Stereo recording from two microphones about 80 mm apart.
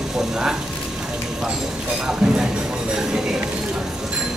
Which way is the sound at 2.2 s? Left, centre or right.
Centre.